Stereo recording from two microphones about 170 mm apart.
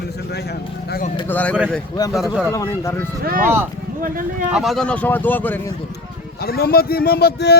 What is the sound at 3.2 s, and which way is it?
Speech, 60° right (ahead or behind).